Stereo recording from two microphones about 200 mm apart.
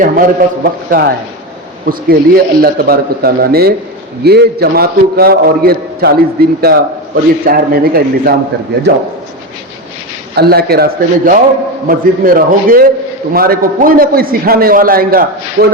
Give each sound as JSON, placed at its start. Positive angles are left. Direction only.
{"t": 0.0, "sound": "a man's voice", "side_deg": -45}
{"t": 10.3, "sound": "a man's voice", "side_deg": -50}
{"t": 15.6, "sound": "speech", "side_deg": -60}